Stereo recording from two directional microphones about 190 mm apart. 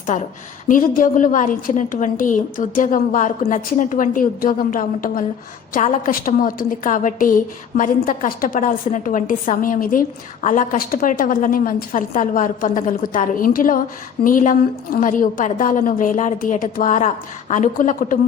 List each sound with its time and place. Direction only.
0.1 s a woman's voice: 40° left (ahead or behind)